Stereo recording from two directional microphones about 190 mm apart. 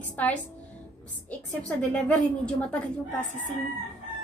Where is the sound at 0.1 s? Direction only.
5° left (ahead or behind).